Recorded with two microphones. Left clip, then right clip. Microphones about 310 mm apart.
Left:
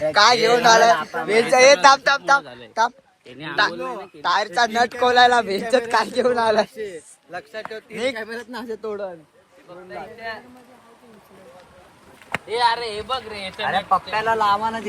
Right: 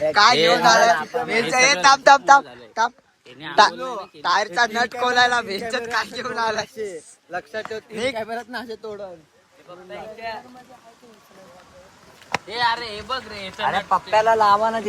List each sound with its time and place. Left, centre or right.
0.1 s speech: centre
2.0 s speech: centre
3.8 s speech: centre
7.3 s speech: right
7.8 s speech: centre
8.8 s speech: left
12.5 s speech: centre
13.7 s speech: centre; by 14.8 s right